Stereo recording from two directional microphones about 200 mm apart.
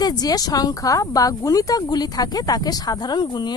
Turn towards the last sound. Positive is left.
turn(degrees=20)  # may be behind; listen again after turning